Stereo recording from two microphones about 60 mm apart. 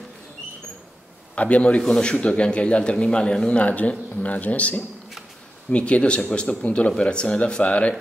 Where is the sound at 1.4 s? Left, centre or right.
Left.